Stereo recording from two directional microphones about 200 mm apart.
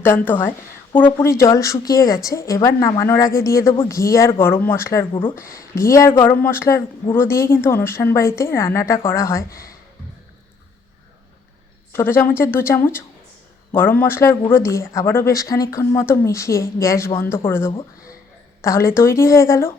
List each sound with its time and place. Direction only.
0.0 s speech: 10° left (ahead or behind)
9.5 s speech: 45° left (ahead or behind)
11.9 s a woman's voice: 10° left (ahead or behind)
17.7 s speech: 25° left (ahead or behind)
18.6 s speech: 15° left (ahead or behind)